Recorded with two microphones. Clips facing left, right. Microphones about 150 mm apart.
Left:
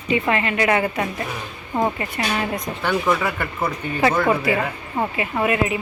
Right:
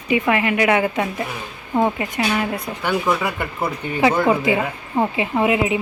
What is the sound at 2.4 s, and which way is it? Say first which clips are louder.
Speech: right 1 dB; 10° right (ahead or behind).